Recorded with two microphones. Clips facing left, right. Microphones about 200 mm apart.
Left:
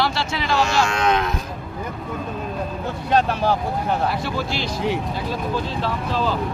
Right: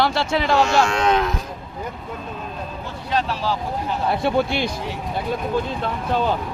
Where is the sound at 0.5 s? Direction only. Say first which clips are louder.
Right 1 dB; 30° right (ahead or behind).